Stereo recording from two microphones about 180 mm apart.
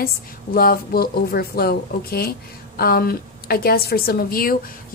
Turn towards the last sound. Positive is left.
turn(degrees=55)  # may be behind; listen again after turning